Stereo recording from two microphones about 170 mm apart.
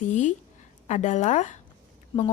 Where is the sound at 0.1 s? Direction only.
45° left (ahead or behind).